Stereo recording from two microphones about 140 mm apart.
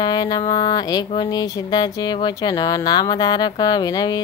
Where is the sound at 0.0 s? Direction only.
30° left (ahead or behind).